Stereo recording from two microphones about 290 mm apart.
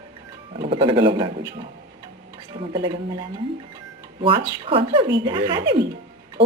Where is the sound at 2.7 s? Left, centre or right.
Centre.